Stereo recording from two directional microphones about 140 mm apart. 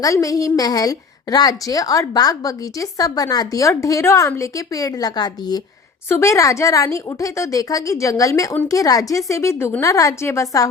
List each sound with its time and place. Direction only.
0.0 s a woman's voice: 25° left (ahead or behind)